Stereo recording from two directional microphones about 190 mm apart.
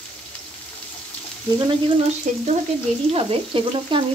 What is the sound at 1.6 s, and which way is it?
Speech, 25° right (ahead or behind).